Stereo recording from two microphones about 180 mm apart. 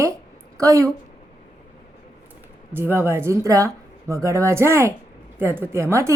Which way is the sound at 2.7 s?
10° right (ahead or behind).